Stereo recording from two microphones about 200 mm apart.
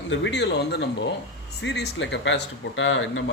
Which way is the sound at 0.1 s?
60° left (ahead or behind).